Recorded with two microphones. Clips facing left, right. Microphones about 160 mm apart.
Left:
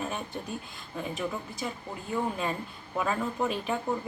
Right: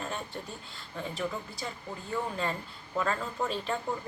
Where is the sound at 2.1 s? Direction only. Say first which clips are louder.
Left 2 dB; 10° left (ahead or behind).